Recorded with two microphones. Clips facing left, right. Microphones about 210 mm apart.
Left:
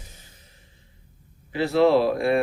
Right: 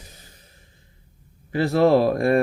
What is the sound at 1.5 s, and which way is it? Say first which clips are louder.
Speech: right 1 dB; 45° right (ahead or behind).